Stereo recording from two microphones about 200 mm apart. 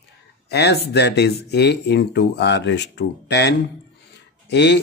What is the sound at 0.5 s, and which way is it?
Speech, 55° left (ahead or behind).